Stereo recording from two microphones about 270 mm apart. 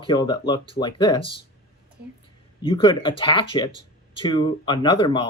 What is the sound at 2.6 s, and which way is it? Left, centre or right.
Speech, centre.